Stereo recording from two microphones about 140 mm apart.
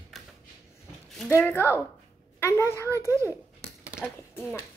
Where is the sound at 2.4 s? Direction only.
15° left (ahead or behind).